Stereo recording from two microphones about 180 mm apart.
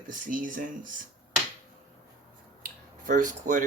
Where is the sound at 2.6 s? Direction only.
50° right (ahead or behind).